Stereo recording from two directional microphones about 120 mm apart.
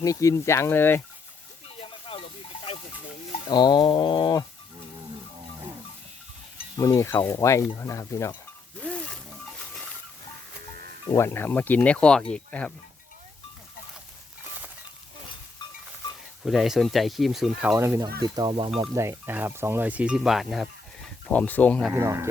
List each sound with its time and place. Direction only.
0.0 s speech: 25° left (ahead or behind)
1.8 s a sound: 50° left (ahead or behind)
3.3 s speech: 40° left (ahead or behind)
6.7 s speech: 25° left (ahead or behind)
8.8 s wild animals: 10° left (ahead or behind)
11.2 s speech: 20° left (ahead or behind)
16.4 s speech: 5° right (ahead or behind)
17.7 s speech: 25° right (ahead or behind)
18.0 s speech: 40° right (ahead or behind)
18.8 s speech: 20° right (ahead or behind); by 21.8 s 10° left (ahead or behind)
21.9 s speech: 20° right (ahead or behind)